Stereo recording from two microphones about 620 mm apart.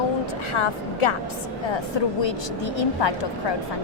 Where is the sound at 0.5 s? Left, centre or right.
Left.